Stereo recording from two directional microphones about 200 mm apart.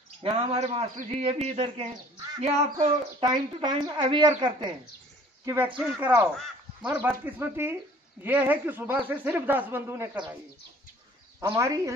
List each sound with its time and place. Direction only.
0.2 s a man's voice: 30° right (ahead or behind)
11.3 s speech: 15° right (ahead or behind)